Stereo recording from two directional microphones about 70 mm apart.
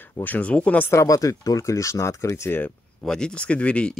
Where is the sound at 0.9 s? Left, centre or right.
Left.